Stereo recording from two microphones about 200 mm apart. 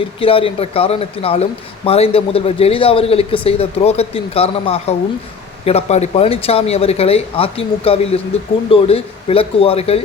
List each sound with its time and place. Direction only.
0.2 s speech: 25° left (ahead or behind)